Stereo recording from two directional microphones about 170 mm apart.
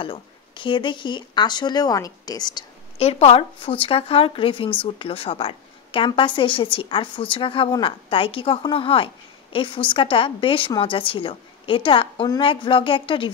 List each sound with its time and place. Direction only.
0.0 s speech: 30° left (ahead or behind)
3.0 s a woman's voice: 35° left (ahead or behind)